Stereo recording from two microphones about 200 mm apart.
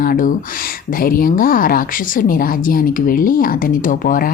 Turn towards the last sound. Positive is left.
turn(degrees=45)  # may be behind; listen again after turning